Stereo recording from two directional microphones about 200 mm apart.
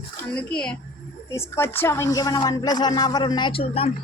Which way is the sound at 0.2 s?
5° left (ahead or behind).